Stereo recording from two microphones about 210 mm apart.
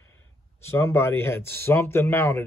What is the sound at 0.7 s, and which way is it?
Speech, 10° left (ahead or behind).